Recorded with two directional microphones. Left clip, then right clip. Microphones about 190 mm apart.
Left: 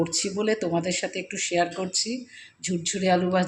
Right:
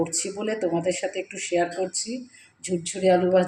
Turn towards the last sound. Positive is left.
turn(degrees=35)  # may be behind; listen again after turning